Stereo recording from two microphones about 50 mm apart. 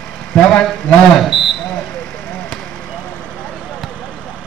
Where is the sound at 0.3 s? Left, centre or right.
Centre.